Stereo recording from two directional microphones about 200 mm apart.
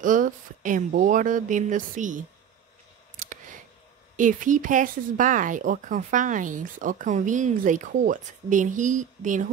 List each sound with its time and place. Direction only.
0.0 s speech: 40° right (ahead or behind)
4.2 s speech: 40° right (ahead or behind)